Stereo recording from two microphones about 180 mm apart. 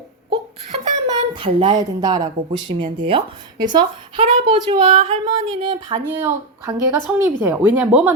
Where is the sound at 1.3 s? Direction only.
25° right (ahead or behind).